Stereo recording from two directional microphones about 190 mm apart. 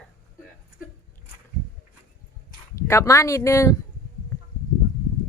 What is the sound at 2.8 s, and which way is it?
Speech, 15° left (ahead or behind).